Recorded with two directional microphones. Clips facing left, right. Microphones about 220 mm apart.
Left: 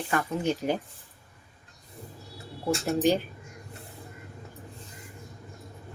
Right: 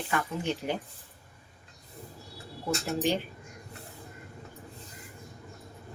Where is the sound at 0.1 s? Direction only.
40° left (ahead or behind).